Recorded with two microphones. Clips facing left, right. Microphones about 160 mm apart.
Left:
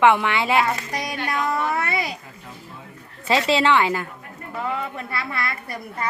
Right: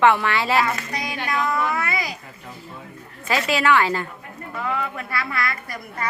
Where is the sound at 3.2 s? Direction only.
25° left (ahead or behind).